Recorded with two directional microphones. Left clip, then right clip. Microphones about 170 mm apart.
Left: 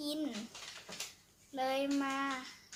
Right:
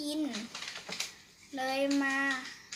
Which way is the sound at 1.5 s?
15° left (ahead or behind).